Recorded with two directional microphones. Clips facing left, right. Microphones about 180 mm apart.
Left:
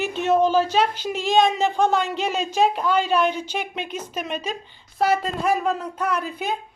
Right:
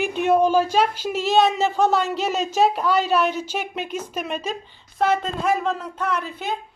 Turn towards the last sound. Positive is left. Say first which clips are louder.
# left 1 dB
turn(degrees=10)  # may be behind; listen again after turning